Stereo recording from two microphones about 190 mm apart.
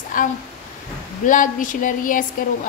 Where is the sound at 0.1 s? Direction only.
45° left (ahead or behind).